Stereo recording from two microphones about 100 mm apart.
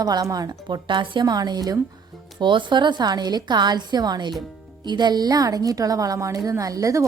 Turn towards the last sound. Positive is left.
turn(degrees=-35)  # may be behind; listen again after turning